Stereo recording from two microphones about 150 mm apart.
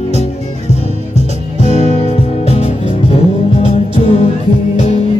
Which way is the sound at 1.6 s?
50° left (ahead or behind).